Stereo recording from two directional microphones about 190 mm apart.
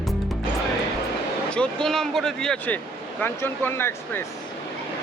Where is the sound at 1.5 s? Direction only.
5° left (ahead or behind).